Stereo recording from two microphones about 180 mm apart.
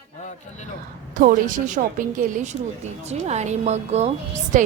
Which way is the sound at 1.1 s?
50° right (ahead or behind).